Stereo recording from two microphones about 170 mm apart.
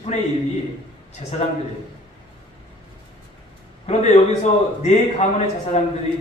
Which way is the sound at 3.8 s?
40° left (ahead or behind).